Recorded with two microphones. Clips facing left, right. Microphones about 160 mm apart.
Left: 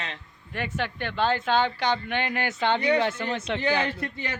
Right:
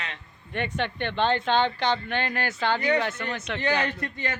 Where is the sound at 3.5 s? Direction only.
10° left (ahead or behind).